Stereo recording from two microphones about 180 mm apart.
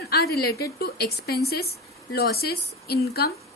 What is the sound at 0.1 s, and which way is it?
Speech, 60° left (ahead or behind).